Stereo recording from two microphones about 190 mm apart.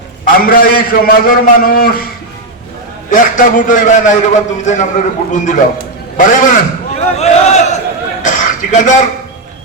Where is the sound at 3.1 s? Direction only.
45° left (ahead or behind).